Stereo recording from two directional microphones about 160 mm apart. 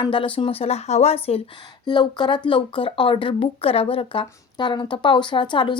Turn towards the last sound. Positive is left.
turn(degrees=30)  # may be behind; listen again after turning